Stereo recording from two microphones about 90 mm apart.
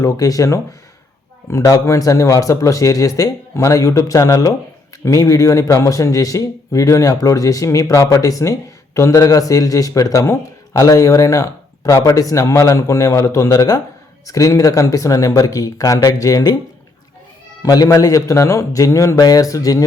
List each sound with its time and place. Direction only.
0.0 s speech: 40° left (ahead or behind)
17.6 s speech: 45° left (ahead or behind)